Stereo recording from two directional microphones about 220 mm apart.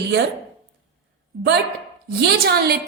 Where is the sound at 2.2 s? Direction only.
45° right (ahead or behind).